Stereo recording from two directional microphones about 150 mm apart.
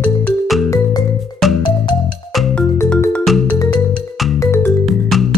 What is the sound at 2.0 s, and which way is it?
Music, 5° left (ahead or behind).